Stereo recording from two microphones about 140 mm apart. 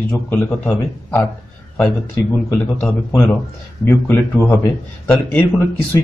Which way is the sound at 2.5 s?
5° left (ahead or behind).